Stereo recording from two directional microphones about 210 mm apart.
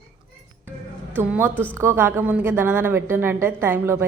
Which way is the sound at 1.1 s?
10° right (ahead or behind).